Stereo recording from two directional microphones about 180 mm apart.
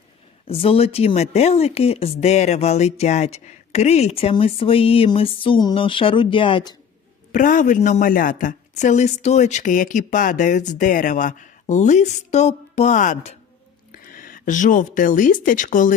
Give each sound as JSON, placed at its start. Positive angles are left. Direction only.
{"t": 0.4, "sound": "speech", "side_deg": 30}
{"t": 7.3, "sound": "a woman's voice", "side_deg": 45}